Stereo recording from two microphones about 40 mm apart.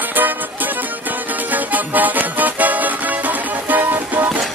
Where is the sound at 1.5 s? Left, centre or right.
Right.